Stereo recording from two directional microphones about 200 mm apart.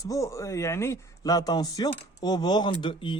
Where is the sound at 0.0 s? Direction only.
15° left (ahead or behind).